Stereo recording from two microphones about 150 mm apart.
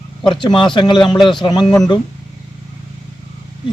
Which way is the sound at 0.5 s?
30° left (ahead or behind).